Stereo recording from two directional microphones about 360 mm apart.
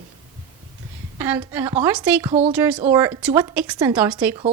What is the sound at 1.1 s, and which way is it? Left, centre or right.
A woman's voice, centre.